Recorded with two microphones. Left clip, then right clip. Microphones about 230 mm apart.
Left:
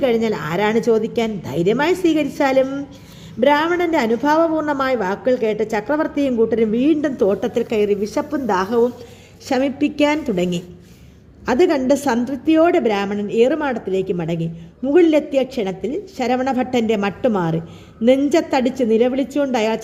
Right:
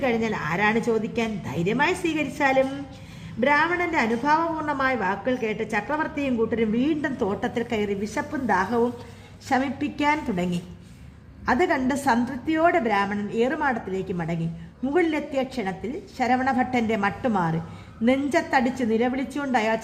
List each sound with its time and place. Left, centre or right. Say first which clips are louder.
0.0 s a woman's voice: left 7 dB; centre